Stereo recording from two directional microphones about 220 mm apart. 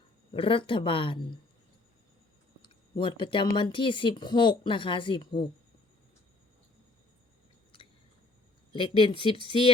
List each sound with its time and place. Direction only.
0.3 s speech: 25° left (ahead or behind)
2.6 s a sound: 25° left (ahead or behind)
3.5 s speech: 20° left (ahead or behind)
8.7 s speech: 25° left (ahead or behind)